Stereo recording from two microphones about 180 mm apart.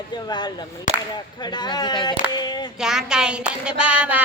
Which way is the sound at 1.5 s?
25° left (ahead or behind).